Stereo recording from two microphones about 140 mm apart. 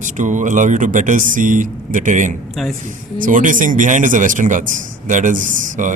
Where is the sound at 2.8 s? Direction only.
65° right (ahead or behind).